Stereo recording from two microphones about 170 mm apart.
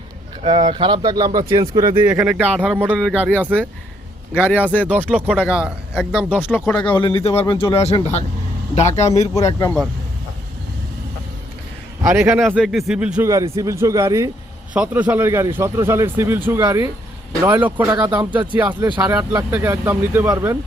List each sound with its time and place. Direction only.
0.4 s speech: 30° right (ahead or behind)
2.0 s a man's voice: 10° right (ahead or behind)
4.8 s a man's voice: 10° right (ahead or behind)
6.5 s speech: 5° left (ahead or behind)
7.0 s speech: 30° left (ahead or behind)
9.3 s speech: 20° left (ahead or behind)
12.0 s a man's voice: 15° right (ahead or behind)
13.2 s a man's voice: 20° right (ahead or behind)